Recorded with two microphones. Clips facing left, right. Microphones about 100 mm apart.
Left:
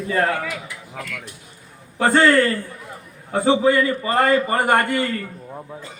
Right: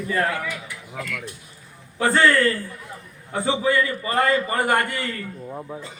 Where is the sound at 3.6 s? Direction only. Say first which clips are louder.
Left 4 dB; 25° left (ahead or behind).